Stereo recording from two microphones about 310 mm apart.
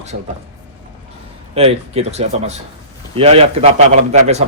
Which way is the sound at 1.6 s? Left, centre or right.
Centre.